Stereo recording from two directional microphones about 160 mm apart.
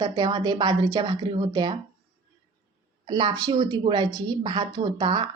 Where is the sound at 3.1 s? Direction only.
30° right (ahead or behind).